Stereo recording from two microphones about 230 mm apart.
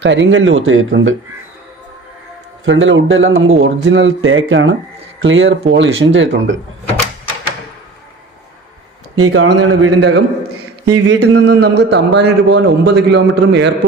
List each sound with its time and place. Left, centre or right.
0.0 s speech: right
2.6 s speech: right
9.1 s a man's voice: right